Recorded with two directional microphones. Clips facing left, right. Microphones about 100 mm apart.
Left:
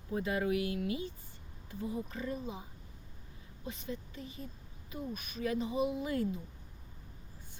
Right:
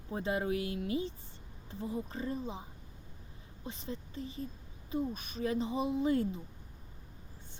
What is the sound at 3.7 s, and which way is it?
Speech, 30° right (ahead or behind).